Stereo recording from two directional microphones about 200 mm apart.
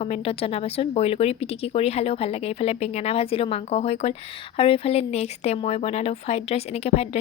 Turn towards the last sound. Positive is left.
turn(degrees=30)  # may be behind; listen again after turning